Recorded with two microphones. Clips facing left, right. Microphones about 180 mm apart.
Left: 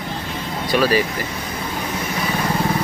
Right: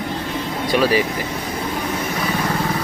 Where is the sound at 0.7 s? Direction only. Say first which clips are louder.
Even; 20° right (ahead or behind).